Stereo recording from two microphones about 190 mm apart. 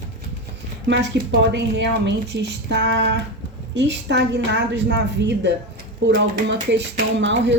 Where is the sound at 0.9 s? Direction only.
65° right (ahead or behind).